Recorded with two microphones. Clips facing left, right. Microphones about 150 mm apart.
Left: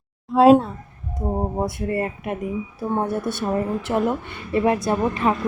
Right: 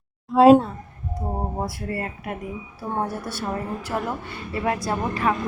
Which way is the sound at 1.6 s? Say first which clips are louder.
Left 5 dB; 25° left (ahead or behind).